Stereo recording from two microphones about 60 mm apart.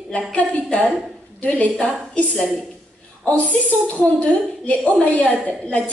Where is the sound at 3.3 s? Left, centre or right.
Left.